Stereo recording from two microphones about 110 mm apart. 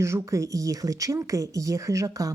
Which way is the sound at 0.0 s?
25° right (ahead or behind).